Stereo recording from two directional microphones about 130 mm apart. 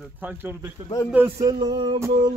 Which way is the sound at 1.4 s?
30° right (ahead or behind).